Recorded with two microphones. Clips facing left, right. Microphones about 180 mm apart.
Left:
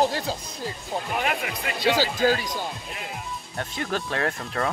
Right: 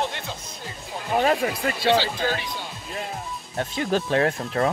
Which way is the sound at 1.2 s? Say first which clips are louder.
Right 11 dB; 35° right (ahead or behind).